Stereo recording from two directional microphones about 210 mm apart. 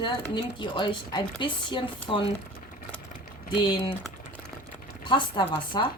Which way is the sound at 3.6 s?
20° left (ahead or behind).